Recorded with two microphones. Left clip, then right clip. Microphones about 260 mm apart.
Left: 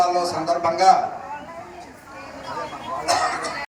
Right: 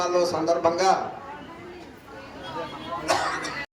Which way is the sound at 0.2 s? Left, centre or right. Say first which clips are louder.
Even; centre.